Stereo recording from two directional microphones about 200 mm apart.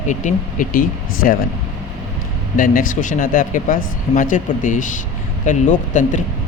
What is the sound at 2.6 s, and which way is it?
Speech, 40° left (ahead or behind).